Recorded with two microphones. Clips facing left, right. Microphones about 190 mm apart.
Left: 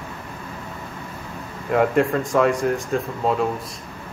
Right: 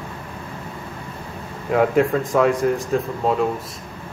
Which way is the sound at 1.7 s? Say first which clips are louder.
Right 1 dB; centre (ahead or behind).